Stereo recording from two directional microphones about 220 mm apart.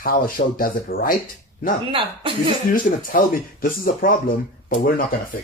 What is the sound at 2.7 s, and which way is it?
Speech, 40° left (ahead or behind).